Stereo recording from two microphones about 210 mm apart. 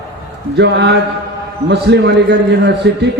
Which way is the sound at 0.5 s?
55° right (ahead or behind).